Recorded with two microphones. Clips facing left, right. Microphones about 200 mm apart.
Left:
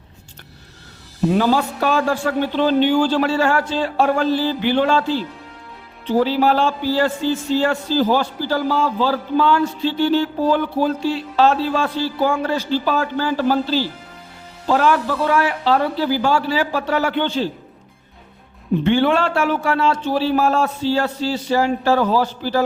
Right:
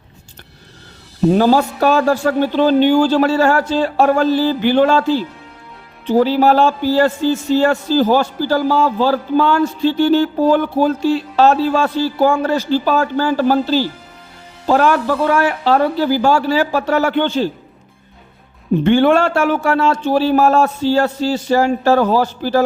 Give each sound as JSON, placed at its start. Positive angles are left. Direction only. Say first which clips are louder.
{"t": 1.3, "sound": "speech", "louder": "right 5 dB", "side_deg": -40}
{"t": 18.8, "sound": "speech", "louder": "right 5 dB", "side_deg": -50}